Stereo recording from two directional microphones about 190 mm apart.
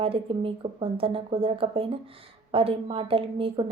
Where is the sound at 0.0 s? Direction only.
30° right (ahead or behind).